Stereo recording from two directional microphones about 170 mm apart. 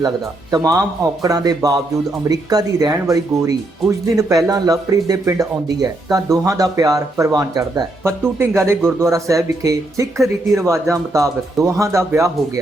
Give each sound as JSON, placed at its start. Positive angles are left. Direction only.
{"t": 0.5, "sound": "speech", "side_deg": -20}